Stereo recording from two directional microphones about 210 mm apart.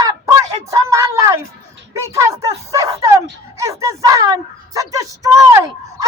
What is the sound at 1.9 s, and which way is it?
Speech, 15° right (ahead or behind).